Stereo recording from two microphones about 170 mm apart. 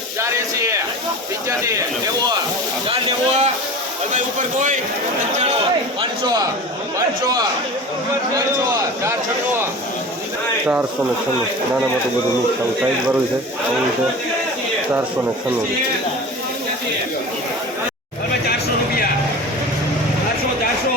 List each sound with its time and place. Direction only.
0.2 s a sound: 15° right (ahead or behind)
2.9 s a man's voice: 40° right (ahead or behind)
6.0 s a man's voice: 25° right (ahead or behind)